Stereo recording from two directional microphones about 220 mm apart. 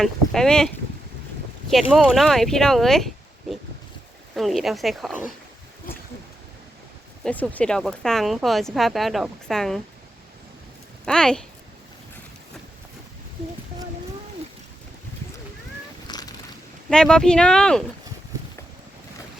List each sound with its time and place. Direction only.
0.0 s speech: 5° left (ahead or behind)
1.7 s speech: centre (ahead or behind)
4.4 s speech: centre (ahead or behind)
7.3 s speech: 5° left (ahead or behind)
11.0 s speech: 5° left (ahead or behind)
16.0 s cat: 20° left (ahead or behind)
16.9 s speech: 5° left (ahead or behind)